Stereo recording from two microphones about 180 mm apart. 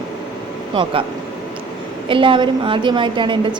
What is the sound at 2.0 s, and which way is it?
Speech, 30° right (ahead or behind).